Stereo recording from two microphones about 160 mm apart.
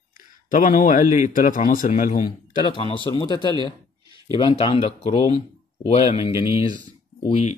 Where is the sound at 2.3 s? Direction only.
30° left (ahead or behind).